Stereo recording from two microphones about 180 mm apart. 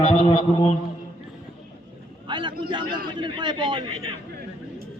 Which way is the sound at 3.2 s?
25° right (ahead or behind).